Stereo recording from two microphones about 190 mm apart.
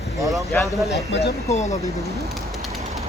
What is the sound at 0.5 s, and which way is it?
Speech, 10° left (ahead or behind).